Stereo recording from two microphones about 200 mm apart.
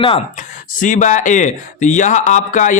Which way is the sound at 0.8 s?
40° left (ahead or behind).